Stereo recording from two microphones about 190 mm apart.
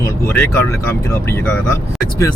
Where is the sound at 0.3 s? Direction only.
10° left (ahead or behind).